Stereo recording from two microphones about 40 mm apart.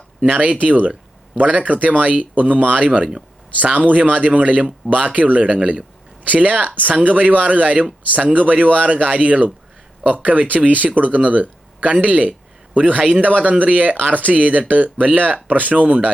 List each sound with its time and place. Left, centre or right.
0.3 s speech: right